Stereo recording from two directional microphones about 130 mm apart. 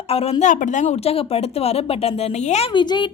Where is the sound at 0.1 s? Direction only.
50° left (ahead or behind).